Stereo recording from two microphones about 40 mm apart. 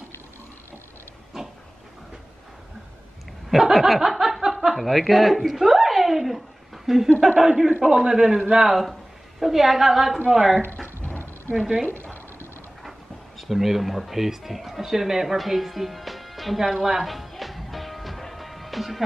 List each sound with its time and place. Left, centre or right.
3.4 s snicker: centre
7.3 s a man's voice: centre
11.5 s a man's voice: centre
11.9 s a sound: left
13.4 s speech: centre
15.3 s music: centre